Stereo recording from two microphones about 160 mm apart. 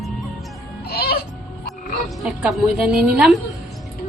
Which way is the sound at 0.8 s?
75° left (ahead or behind).